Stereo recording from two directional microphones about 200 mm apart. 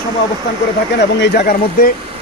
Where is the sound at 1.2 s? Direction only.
55° left (ahead or behind).